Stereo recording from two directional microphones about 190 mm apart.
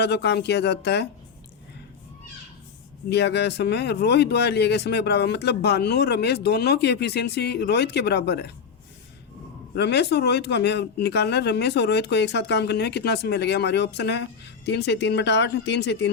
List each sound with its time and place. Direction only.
0.0 s speech: 60° left (ahead or behind)
3.1 s speech: 65° left (ahead or behind)
9.7 s speech: 60° left (ahead or behind)